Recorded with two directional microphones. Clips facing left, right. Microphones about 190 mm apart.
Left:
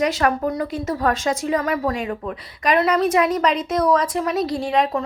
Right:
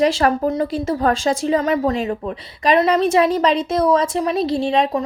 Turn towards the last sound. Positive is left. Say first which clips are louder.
# right 3 dB
turn(degrees=-25)  # may be behind; listen again after turning